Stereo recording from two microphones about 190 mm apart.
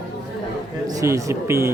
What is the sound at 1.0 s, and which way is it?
Speech, 15° right (ahead or behind).